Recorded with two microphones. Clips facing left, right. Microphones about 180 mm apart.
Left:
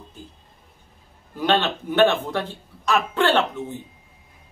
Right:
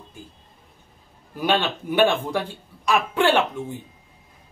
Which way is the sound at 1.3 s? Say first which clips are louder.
Left 1 dB; 10° right (ahead or behind).